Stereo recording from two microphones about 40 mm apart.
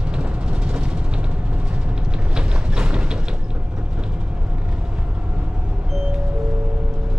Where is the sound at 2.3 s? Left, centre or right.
Right.